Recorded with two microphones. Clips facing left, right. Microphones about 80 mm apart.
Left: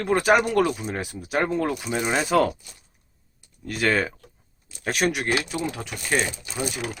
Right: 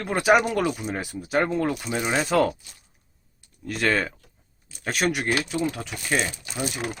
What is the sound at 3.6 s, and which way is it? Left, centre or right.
Speech, centre.